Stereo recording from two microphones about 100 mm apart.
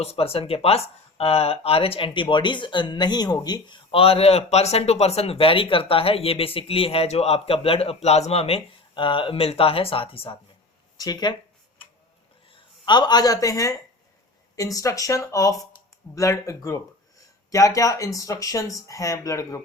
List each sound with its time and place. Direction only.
0.0 s speech: 80° left; by 3.8 s 45° left (ahead or behind)
3.9 s speech: 75° left (ahead or behind)
10.9 s speech: 40° left (ahead or behind)
12.5 s speech: 50° left (ahead or behind); by 19.6 s 35° left (ahead or behind)